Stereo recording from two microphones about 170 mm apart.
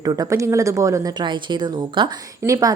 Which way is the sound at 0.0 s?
20° right (ahead or behind).